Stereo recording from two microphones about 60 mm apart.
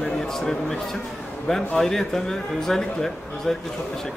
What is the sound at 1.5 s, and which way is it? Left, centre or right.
Speech, centre.